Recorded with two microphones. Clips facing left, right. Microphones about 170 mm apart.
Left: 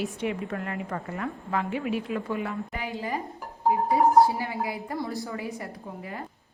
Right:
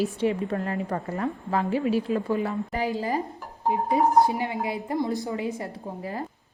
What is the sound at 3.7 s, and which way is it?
A woman's voice, 20° right (ahead or behind).